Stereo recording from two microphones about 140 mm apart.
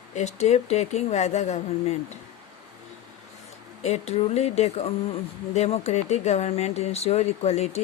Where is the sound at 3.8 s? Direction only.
50° left (ahead or behind).